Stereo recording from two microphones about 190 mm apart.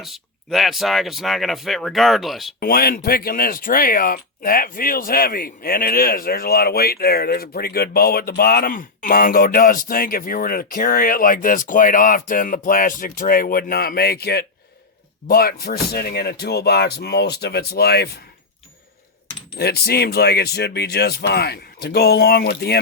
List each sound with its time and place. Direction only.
0.0 s speech: centre (ahead or behind)
2.6 s speech: 50° left (ahead or behind)
19.5 s speech: 55° left (ahead or behind)